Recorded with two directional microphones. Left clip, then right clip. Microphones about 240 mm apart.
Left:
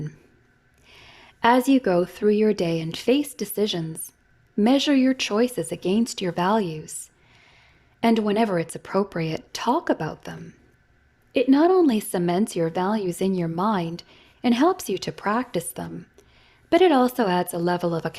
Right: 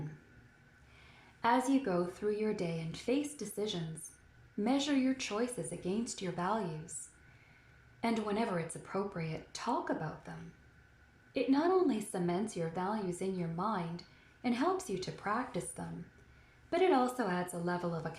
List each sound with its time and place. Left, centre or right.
1.4 s a woman's voice: left
8.0 s a woman's voice: left
11.3 s a woman's voice: left